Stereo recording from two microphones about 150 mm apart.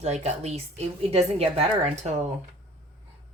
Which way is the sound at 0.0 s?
45° right (ahead or behind).